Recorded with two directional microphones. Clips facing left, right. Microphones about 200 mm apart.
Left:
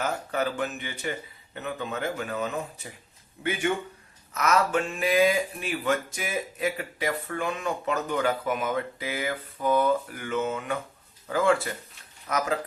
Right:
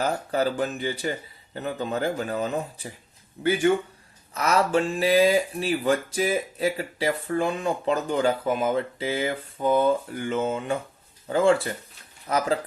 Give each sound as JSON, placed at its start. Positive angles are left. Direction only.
{"t": 0.0, "sound": "speech", "side_deg": -35}
{"t": 4.4, "sound": "speech", "side_deg": -30}